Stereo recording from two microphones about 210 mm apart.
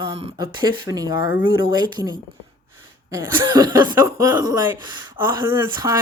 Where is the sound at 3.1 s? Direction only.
15° right (ahead or behind).